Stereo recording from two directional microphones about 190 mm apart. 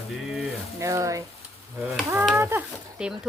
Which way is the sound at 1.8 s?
Centre (ahead or behind).